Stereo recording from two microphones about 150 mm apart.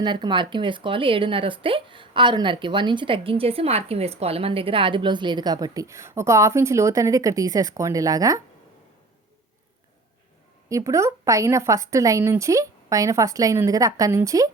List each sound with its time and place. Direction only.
0.0 s speech: 30° right (ahead or behind)
10.7 s speech: 20° right (ahead or behind)